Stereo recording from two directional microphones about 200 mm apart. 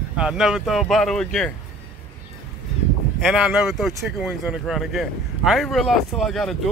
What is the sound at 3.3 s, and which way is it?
Speech, centre (ahead or behind).